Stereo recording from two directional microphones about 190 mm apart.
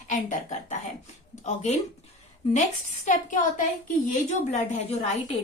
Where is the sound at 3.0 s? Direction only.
40° left (ahead or behind).